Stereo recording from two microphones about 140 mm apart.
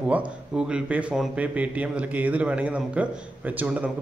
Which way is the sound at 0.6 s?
5° right (ahead or behind).